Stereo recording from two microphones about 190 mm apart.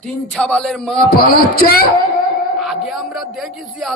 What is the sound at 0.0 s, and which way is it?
Speech, 5° left (ahead or behind).